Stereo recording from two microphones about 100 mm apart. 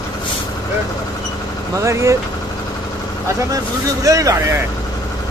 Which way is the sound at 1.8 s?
30° right (ahead or behind).